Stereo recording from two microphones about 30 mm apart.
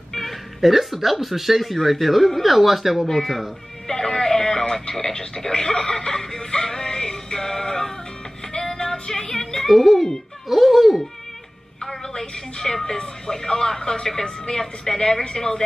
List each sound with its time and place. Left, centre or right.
0.1 s music: centre
0.7 s speech: centre
3.1 s a woman's voice: centre
3.8 s music: centre
4.9 s speech: left
5.9 s synthetic singing: centre
8.9 s music: left
9.4 s a sound: centre
9.7 s speech: centre
12.1 s a woman's voice: centre